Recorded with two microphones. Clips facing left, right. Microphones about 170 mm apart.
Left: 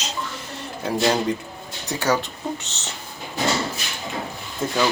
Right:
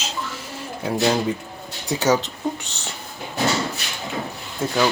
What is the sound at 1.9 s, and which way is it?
Speech, 20° right (ahead or behind).